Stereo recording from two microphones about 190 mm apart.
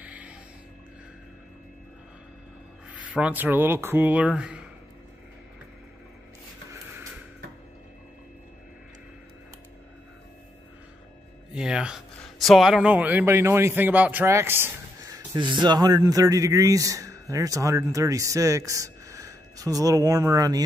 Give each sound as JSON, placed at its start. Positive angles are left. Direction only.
{"t": 0.0, "sound": "music", "side_deg": -5}
{"t": 2.9, "sound": "speech", "side_deg": -5}
{"t": 6.7, "sound": "music", "side_deg": -15}
{"t": 11.5, "sound": "a man's voice", "side_deg": -5}